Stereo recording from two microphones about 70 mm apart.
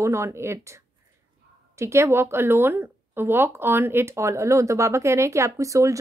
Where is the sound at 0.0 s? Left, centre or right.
Right.